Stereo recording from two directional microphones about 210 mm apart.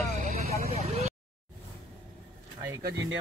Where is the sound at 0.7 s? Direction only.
30° right (ahead or behind).